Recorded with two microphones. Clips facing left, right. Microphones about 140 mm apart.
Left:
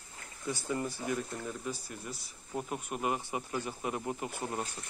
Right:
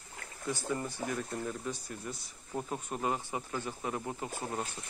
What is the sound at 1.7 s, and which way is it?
Speech, 5° left (ahead or behind).